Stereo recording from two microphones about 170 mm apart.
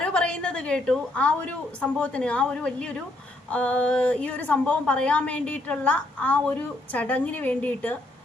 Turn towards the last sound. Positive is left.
turn(degrees=10)  # may be behind; listen again after turning